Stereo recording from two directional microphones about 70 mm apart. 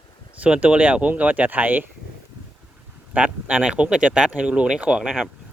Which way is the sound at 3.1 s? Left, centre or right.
Centre.